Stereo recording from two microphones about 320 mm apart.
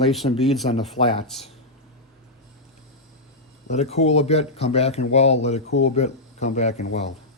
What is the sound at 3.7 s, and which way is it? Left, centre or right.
Speech, centre.